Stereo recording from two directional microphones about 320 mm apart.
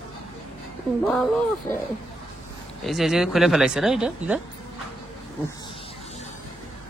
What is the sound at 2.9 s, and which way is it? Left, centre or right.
Speech, centre.